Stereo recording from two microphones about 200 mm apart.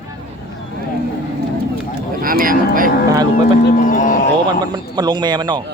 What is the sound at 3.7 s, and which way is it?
Speech, 40° left (ahead or behind).